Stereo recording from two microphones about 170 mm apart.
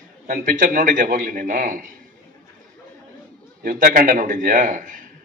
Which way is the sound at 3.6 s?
55° right (ahead or behind).